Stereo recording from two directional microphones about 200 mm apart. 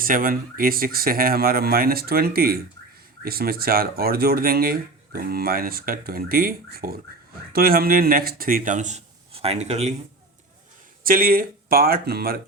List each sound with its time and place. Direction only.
0.0 s speech: 45° right (ahead or behind)
11.0 s speech: 45° right (ahead or behind)